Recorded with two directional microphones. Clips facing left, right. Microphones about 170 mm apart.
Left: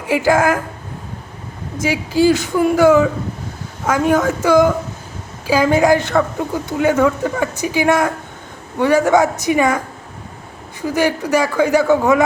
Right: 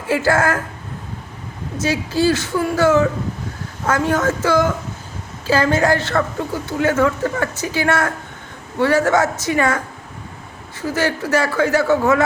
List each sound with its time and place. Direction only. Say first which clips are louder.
0.1 s speech: left 3 dB; 15° left (ahead or behind)
1.8 s speech: left 3 dB; 15° left (ahead or behind)